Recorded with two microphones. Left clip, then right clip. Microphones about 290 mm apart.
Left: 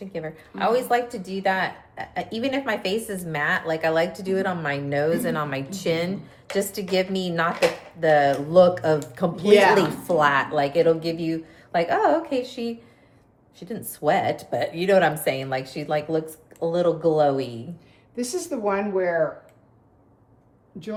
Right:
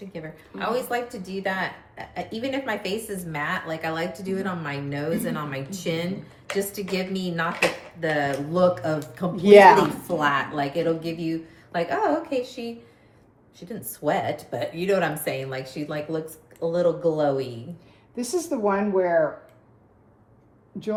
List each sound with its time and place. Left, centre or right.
0.1 s a woman's voice: left
9.4 s speech: right
9.7 s a woman's voice: left
18.2 s speech: centre